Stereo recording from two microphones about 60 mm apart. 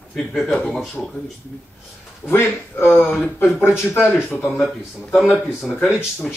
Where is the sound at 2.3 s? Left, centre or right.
Left.